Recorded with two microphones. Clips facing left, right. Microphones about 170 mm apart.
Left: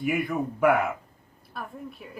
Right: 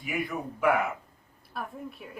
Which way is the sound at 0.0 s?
50° left (ahead or behind).